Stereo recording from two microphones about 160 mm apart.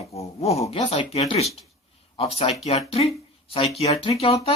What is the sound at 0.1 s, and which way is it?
Speech, 40° left (ahead or behind).